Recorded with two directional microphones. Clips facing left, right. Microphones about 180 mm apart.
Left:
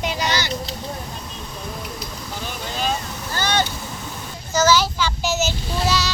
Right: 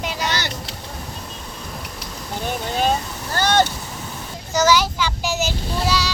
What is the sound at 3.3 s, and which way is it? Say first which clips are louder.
Speech: right 4 dB; 55° right (ahead or behind).